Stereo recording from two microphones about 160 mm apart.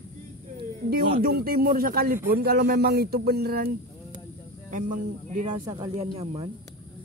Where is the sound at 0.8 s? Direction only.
70° right (ahead or behind).